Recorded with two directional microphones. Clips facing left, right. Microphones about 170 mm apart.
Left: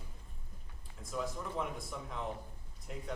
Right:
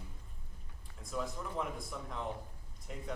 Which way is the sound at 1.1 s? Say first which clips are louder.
Even; centre (ahead or behind).